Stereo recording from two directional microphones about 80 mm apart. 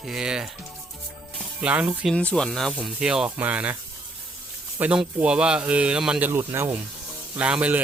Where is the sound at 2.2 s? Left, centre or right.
Centre.